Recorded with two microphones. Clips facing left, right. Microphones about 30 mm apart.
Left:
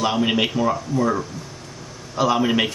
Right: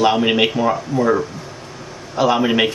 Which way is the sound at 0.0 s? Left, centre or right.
Centre.